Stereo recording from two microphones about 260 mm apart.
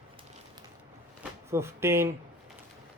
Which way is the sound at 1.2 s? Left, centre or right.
Centre.